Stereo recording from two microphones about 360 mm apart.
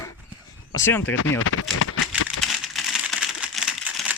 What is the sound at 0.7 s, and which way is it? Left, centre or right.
Speech, centre.